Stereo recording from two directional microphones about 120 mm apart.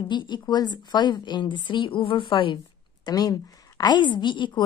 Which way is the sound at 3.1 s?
30° left (ahead or behind).